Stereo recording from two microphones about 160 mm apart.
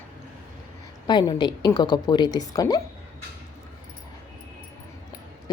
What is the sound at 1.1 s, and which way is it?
A woman's voice, 25° left (ahead or behind).